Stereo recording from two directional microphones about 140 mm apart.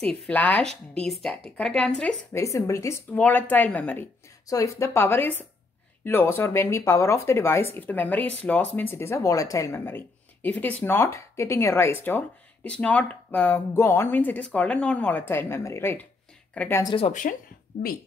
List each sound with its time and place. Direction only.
0.0 s speech: 10° left (ahead or behind)
2.3 s speech: 20° left (ahead or behind)
17.1 s speech: 65° left (ahead or behind)